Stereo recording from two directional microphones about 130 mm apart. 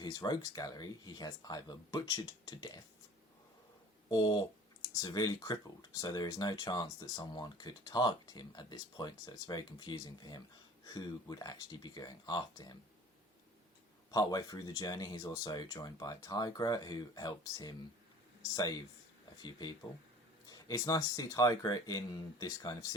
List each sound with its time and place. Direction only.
0.0 s speech: 30° left (ahead or behind)
4.1 s speech: 35° left (ahead or behind)
14.1 s speech: 30° left (ahead or behind)
19.4 s speech: 35° left (ahead or behind)